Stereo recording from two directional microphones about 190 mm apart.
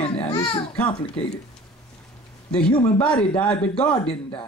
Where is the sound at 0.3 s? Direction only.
25° left (ahead or behind).